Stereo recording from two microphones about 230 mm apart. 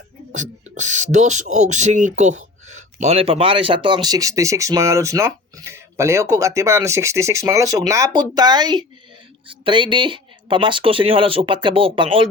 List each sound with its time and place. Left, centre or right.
0.8 s speech: right